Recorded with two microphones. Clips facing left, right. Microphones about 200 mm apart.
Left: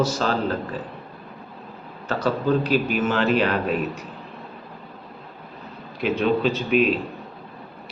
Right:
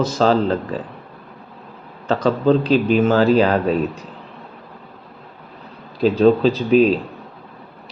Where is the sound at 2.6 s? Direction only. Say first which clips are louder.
Right 6 dB; 10° left (ahead or behind).